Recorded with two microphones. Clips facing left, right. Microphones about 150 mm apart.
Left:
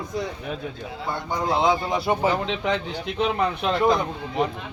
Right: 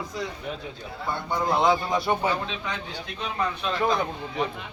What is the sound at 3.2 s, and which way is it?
Speech, 70° left (ahead or behind).